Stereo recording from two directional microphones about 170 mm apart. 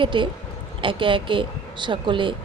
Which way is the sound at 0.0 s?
30° right (ahead or behind).